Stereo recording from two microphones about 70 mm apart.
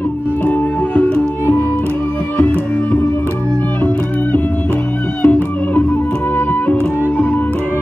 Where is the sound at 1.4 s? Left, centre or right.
Left.